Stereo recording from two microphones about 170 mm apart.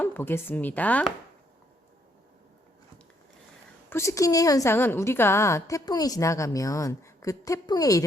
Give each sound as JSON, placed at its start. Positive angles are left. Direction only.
{"t": 0.0, "sound": "speech", "side_deg": 10}
{"t": 3.8, "sound": "a woman's voice", "side_deg": 15}